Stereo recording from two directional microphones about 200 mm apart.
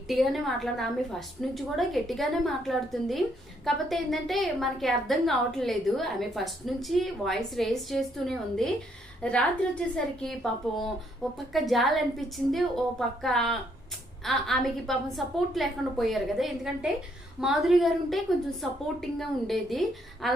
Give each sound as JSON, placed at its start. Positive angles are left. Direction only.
{"t": 0.1, "sound": "a woman's voice", "side_deg": 0}